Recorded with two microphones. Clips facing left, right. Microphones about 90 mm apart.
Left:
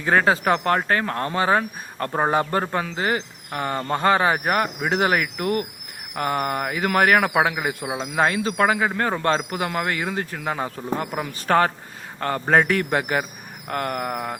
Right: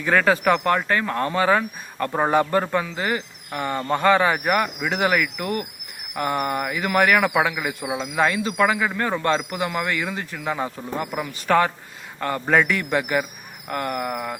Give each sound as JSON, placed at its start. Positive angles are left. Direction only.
{"t": 0.0, "sound": "a man's voice", "side_deg": 35}
{"t": 13.0, "sound": "speech", "side_deg": 40}
{"t": 13.7, "sound": "a man's voice", "side_deg": 50}